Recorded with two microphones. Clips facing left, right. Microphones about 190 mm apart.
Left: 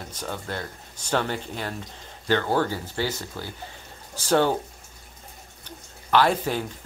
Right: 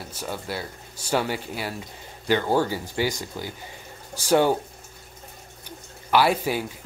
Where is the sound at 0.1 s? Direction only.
10° right (ahead or behind).